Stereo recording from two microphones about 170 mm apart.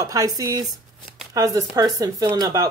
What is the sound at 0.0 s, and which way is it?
Speech, 20° right (ahead or behind).